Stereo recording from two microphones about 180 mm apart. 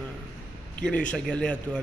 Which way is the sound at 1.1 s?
5° left (ahead or behind).